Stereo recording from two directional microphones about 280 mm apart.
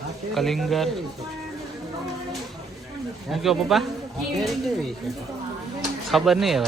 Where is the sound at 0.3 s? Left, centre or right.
Centre.